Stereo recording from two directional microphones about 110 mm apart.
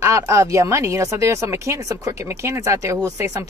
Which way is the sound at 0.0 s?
25° right (ahead or behind).